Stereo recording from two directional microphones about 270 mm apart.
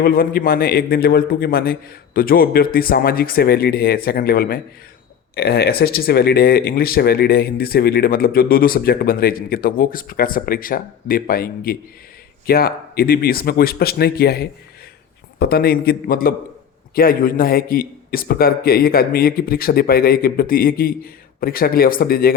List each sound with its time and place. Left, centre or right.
0.0 s speech: left